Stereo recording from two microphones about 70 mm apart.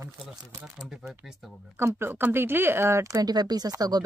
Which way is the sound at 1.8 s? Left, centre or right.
Right.